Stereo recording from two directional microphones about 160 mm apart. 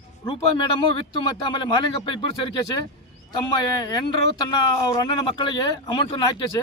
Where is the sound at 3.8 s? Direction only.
25° left (ahead or behind).